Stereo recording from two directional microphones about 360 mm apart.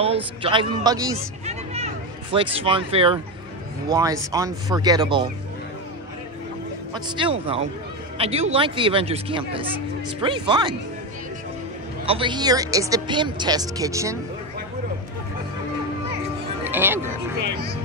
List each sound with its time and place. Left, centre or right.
0.0 s speech: centre
6.9 s speech: centre
12.1 s speech: centre
16.6 s speech: centre